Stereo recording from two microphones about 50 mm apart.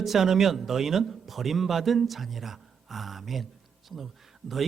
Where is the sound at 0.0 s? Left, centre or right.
Centre.